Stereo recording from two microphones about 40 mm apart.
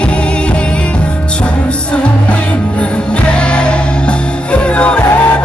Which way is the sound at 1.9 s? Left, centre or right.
Left.